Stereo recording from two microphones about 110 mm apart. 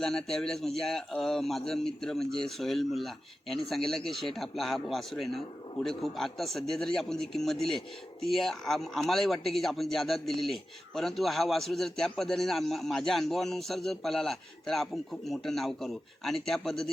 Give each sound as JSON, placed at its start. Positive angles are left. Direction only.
{"t": 0.0, "sound": "a man's voice", "side_deg": 5}